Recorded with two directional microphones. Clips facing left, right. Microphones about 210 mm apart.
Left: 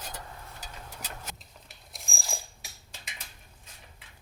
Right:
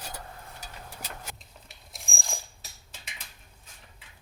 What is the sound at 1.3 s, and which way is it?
Coin, centre (ahead or behind).